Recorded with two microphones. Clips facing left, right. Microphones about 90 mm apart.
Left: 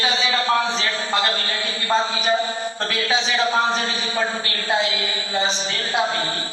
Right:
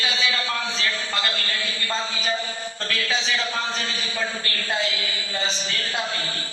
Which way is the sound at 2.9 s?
25° left (ahead or behind).